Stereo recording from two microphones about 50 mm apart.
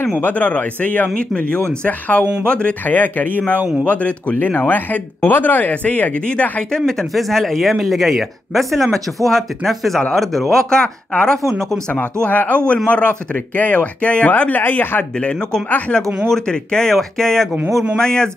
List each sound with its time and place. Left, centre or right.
0.2 s speech: left
6.7 s speech: centre
12.3 s speech: left
15.1 s speech: centre